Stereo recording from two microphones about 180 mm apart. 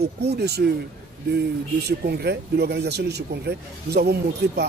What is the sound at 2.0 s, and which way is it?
Speech, 65° right (ahead or behind).